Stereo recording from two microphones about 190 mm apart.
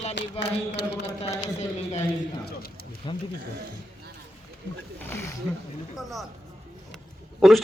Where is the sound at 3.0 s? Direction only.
25° left (ahead or behind).